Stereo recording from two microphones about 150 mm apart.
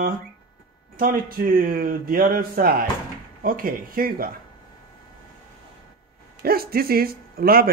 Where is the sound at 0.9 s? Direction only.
70° right (ahead or behind).